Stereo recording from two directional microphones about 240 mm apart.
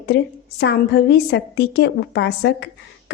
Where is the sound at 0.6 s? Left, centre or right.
Left.